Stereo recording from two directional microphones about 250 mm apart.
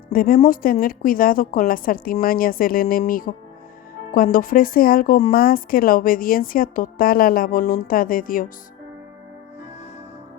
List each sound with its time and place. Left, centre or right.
0.1 s speech: left